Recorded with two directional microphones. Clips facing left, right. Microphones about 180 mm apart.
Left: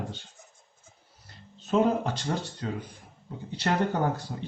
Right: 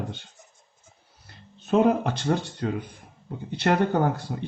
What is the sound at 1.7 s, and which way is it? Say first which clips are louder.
Speech: right 4 dB; 60° right (ahead or behind).